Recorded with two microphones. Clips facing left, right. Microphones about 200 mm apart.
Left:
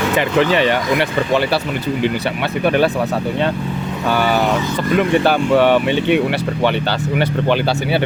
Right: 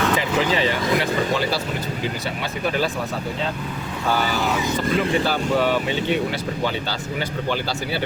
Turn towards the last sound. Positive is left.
turn(degrees=65)  # may be behind; listen again after turning